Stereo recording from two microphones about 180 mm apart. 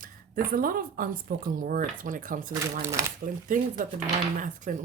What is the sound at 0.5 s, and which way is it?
Speech, 50° right (ahead or behind).